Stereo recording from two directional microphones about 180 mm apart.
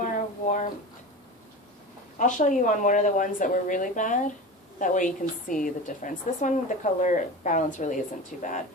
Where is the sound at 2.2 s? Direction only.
45° left (ahead or behind).